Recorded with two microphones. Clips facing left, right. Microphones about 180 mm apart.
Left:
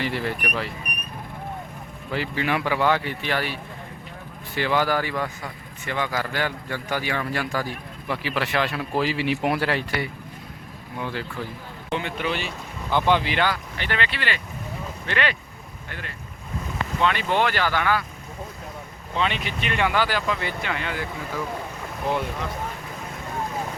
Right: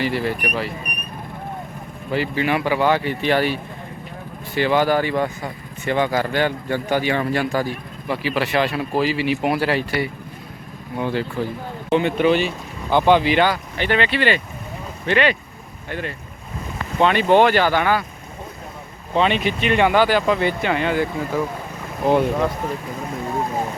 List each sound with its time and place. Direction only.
0.0 s speech: 10° right (ahead or behind)
2.0 s speech: 15° right (ahead or behind)
4.5 s speech: 20° right (ahead or behind)
10.9 s speech: 25° right (ahead or behind)
19.2 s speech: 20° right (ahead or behind)
22.0 s speech: 45° right (ahead or behind)